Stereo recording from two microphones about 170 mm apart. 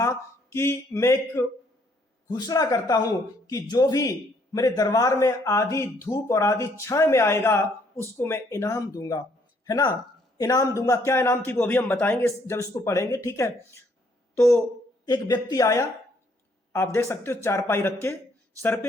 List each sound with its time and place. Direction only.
0.5 s speech: 15° left (ahead or behind)
15.0 s speech: 25° left (ahead or behind)